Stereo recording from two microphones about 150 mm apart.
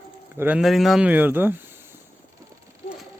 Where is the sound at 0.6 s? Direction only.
Centre (ahead or behind).